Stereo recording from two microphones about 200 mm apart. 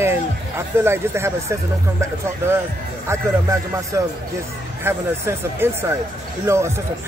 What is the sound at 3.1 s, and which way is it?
Speech, 15° right (ahead or behind).